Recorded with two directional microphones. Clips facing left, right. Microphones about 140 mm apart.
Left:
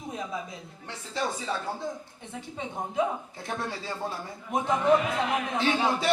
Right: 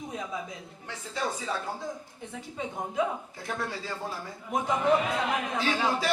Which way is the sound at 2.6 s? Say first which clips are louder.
Left 1 dB; 25° left (ahead or behind).